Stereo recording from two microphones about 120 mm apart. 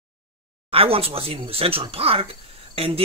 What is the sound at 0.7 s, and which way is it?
Speech, 50° right (ahead or behind).